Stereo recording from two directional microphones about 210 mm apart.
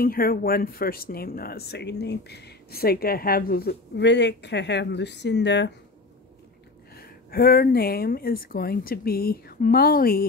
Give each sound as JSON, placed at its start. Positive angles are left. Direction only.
{"t": 0.0, "sound": "speech", "side_deg": 45}
{"t": 7.0, "sound": "speech", "side_deg": 45}